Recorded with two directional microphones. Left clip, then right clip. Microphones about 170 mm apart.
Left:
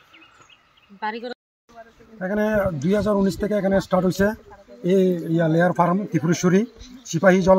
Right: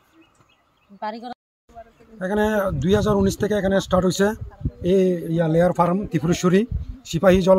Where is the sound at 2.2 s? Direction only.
35° right (ahead or behind).